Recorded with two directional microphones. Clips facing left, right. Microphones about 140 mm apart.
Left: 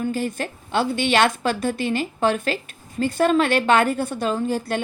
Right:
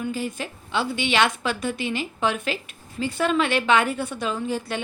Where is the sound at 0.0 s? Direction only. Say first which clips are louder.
Left 4 dB; 45° left (ahead or behind).